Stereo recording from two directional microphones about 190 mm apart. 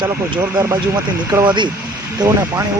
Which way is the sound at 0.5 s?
15° right (ahead or behind).